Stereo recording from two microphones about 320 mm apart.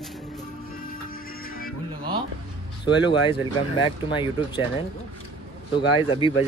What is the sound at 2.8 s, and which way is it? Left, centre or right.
Speech, centre.